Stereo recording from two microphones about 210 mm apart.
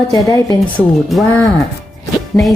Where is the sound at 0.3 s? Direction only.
15° left (ahead or behind).